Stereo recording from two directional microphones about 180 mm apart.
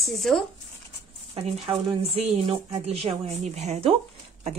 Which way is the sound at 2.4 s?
30° right (ahead or behind).